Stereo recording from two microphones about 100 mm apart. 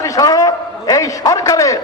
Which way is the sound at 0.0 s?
35° left (ahead or behind).